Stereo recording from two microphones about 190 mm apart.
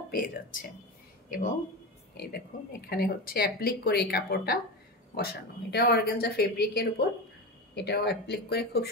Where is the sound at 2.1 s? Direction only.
55° left (ahead or behind).